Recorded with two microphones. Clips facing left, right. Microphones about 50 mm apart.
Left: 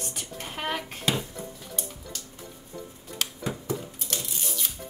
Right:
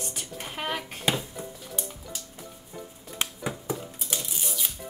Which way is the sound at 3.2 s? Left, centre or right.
Right.